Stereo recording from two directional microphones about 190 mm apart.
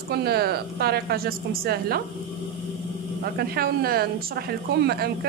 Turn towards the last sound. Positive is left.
turn(degrees=-55)  # may be behind; listen again after turning